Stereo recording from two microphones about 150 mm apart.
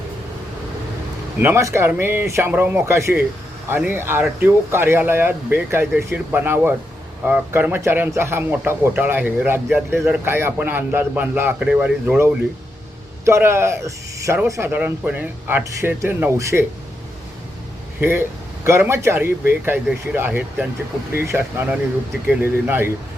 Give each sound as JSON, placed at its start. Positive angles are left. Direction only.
{"t": 1.4, "sound": "speech", "side_deg": -15}
{"t": 18.0, "sound": "speech", "side_deg": -15}